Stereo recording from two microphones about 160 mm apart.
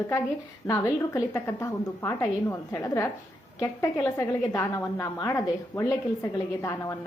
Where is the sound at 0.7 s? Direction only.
15° left (ahead or behind).